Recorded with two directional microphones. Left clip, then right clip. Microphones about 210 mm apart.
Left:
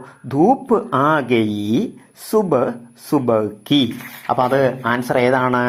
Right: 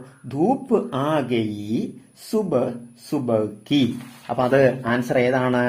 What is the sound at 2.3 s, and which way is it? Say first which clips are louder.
Speech: left 5 dB; 15° left (ahead or behind).